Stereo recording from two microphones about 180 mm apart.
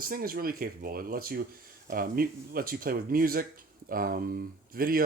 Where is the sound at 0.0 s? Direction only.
50° right (ahead or behind).